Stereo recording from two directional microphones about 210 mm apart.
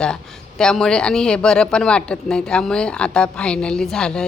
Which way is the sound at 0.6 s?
5° left (ahead or behind).